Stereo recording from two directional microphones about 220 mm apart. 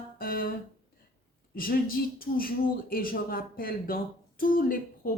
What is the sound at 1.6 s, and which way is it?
Speech, 40° left (ahead or behind).